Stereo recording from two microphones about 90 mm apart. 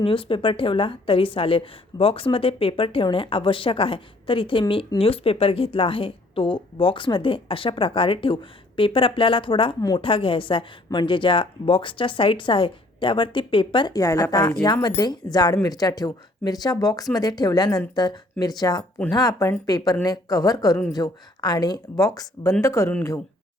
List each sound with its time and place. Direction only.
0.0 s a woman's voice: 75° left (ahead or behind)
4.9 s a woman's voice: 90° left; by 13.9 s 65° left (ahead or behind)
13.9 s speech: 40° left (ahead or behind)